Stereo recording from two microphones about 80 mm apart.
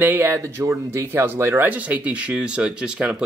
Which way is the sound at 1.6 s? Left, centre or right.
Centre.